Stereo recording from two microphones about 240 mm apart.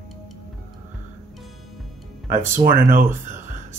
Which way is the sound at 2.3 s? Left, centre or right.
Centre.